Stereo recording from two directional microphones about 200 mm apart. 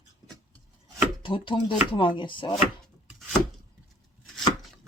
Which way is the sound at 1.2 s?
25° left (ahead or behind).